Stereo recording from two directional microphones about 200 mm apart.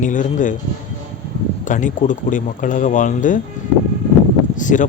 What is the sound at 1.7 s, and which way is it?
A man's voice, 40° left (ahead or behind).